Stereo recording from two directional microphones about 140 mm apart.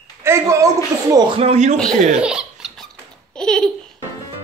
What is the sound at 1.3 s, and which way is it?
Speech, 45° right (ahead or behind).